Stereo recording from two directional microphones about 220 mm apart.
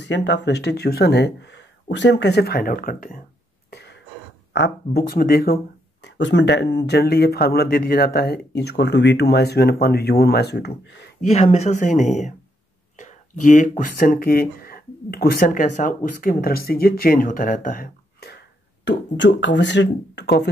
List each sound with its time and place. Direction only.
0.0 s speech: 55° left (ahead or behind)
3.7 s throat clearing: 50° left (ahead or behind)
4.5 s speech: 50° left (ahead or behind)
6.0 s speech: 55° left (ahead or behind)
11.1 s speech: 30° left (ahead or behind)
18.9 s speech: 55° left (ahead or behind)